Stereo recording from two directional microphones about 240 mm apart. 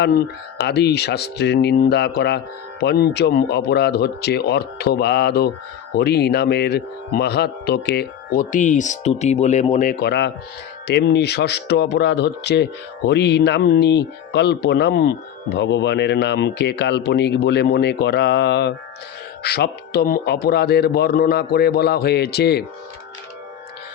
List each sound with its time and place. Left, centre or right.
0.6 s a man's voice: left